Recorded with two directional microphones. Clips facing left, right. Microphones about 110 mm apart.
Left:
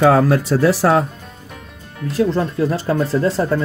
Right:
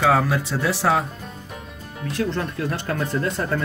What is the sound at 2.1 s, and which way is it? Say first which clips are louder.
Speech: left 7 dB; 30° left (ahead or behind).